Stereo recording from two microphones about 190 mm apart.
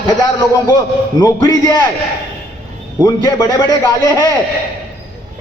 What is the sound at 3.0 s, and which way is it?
Speech, 20° left (ahead or behind).